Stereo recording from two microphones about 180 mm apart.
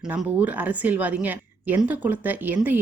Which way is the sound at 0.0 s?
5° right (ahead or behind).